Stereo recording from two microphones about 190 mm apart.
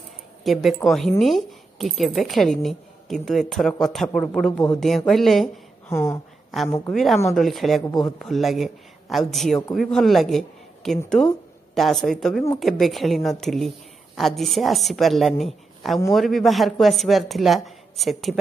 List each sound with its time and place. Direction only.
0.4 s speech: centre (ahead or behind)
5.9 s speech: 15° left (ahead or behind)
6.9 s speech: centre (ahead or behind)
7.8 s speech: 20° left (ahead or behind)
8.2 s a man's voice: centre (ahead or behind)